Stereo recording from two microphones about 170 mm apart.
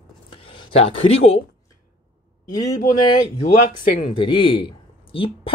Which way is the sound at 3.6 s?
55° left (ahead or behind).